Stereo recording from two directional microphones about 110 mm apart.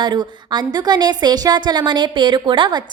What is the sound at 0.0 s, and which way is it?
A woman's voice, 40° right (ahead or behind).